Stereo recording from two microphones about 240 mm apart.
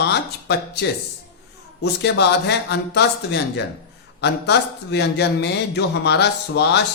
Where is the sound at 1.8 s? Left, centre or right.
Left.